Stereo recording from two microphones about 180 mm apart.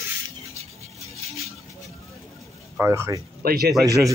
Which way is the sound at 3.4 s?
55° right (ahead or behind).